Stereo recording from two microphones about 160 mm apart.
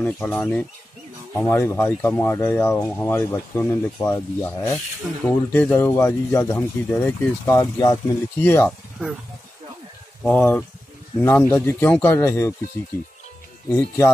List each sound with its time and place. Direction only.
0.0 s speech: 5° left (ahead or behind)
7.4 s speech: 20° left (ahead or behind)
8.4 s speech: 10° left (ahead or behind)
10.2 s speech: 10° left (ahead or behind)
13.7 s speech: 15° left (ahead or behind)